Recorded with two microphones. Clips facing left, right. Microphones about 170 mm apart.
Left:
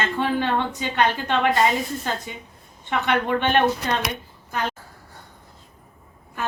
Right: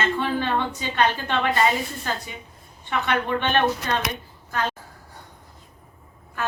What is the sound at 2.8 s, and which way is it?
Speech, 15° left (ahead or behind).